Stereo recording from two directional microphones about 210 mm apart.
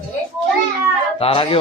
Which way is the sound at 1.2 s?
25° left (ahead or behind).